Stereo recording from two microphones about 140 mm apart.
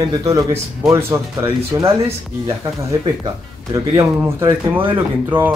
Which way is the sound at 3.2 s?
30° right (ahead or behind).